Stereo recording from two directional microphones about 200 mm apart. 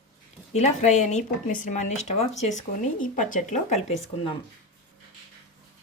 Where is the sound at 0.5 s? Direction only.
35° left (ahead or behind).